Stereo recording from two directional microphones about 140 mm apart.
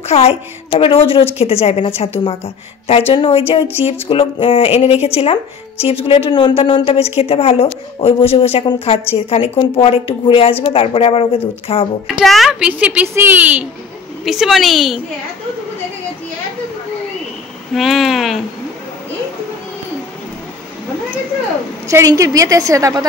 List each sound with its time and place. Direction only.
0.0 s speech: 50° left (ahead or behind)
12.1 s a child's voice: centre (ahead or behind)
14.2 s a woman's voice: centre (ahead or behind)
17.7 s a woman's voice: centre (ahead or behind)
21.8 s a woman's voice: 20° right (ahead or behind)